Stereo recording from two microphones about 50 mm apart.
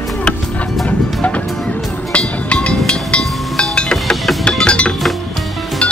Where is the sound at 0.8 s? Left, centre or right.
Left.